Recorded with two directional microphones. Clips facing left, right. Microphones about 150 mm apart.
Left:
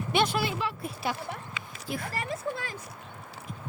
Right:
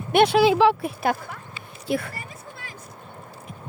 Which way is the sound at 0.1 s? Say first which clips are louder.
Right 11 dB; 70° right (ahead or behind).